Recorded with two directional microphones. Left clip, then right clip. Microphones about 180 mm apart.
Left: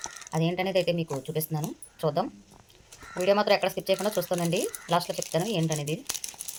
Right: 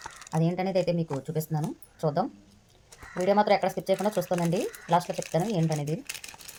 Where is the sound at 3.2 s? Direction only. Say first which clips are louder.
Even; 20° right (ahead or behind).